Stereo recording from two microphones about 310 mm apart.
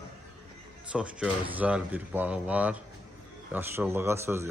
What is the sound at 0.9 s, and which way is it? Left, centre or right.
Speech, centre.